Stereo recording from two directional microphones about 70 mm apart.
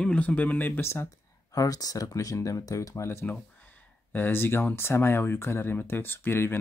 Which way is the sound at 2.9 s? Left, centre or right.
Left.